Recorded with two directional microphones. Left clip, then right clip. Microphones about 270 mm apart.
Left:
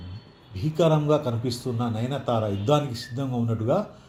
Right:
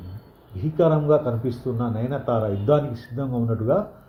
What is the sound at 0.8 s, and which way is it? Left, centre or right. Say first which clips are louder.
Speech: right 3 dB; centre.